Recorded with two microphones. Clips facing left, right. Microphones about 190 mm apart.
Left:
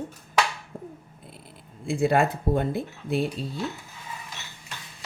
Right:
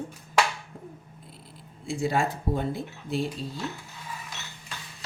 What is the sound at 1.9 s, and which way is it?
Speech, 60° left (ahead or behind).